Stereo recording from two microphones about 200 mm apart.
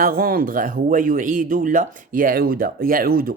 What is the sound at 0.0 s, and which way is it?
Speech, 50° right (ahead or behind).